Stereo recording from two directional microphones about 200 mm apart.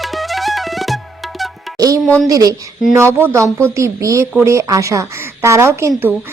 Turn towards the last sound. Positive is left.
turn(degrees=-10)  # may be behind; listen again after turning